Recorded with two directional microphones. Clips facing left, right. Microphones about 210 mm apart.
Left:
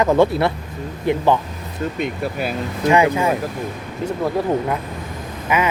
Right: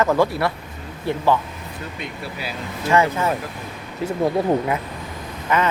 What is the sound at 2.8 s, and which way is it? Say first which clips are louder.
Speech: left 3 dB; 15° left (ahead or behind).